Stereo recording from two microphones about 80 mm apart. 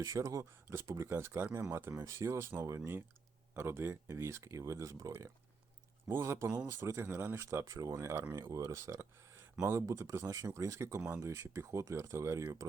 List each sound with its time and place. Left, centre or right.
0.0 s speech: right
11.0 s speech: right
11.3 s speech: right